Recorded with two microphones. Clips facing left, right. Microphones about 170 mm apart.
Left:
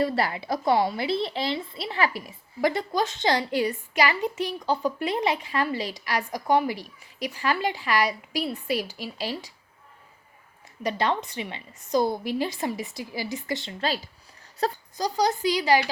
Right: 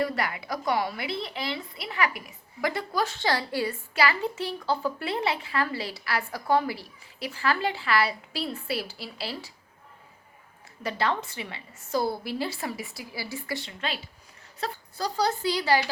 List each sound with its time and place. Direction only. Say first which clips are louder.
0.0 s a woman's voice: left 3 dB; 30° left (ahead or behind)
10.8 s a woman's voice: left 2 dB; 20° left (ahead or behind)
14.6 s speech: left 6 dB; 40° left (ahead or behind)
14.9 s a woman's voice: left 1 dB; 15° left (ahead or behind)